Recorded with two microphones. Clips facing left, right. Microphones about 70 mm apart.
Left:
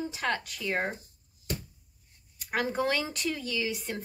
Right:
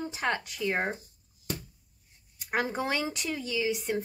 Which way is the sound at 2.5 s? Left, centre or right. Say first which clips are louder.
Left 1 dB; centre.